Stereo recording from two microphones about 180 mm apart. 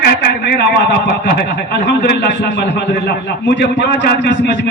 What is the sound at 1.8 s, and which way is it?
Speech, 70° left (ahead or behind).